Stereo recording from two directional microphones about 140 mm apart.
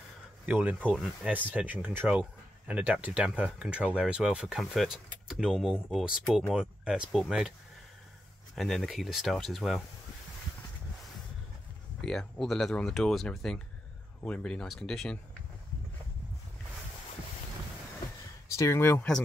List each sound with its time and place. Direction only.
0.5 s speech: 10° right (ahead or behind)
0.8 s speech: centre (ahead or behind)
1.3 s speech: 10° right (ahead or behind)
8.5 s speech: centre (ahead or behind)
12.0 s speech: 5° left (ahead or behind)
18.6 s speech: 20° left (ahead or behind)